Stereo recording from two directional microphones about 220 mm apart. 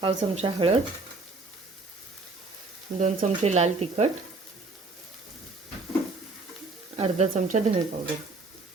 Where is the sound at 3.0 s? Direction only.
30° right (ahead or behind).